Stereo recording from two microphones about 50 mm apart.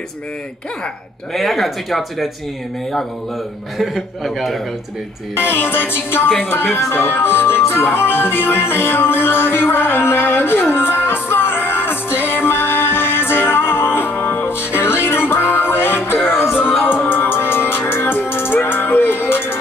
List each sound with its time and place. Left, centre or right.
1.3 s speech: centre
3.7 s speech: centre
5.3 s music: left
6.4 s speech: left
6.9 s music: left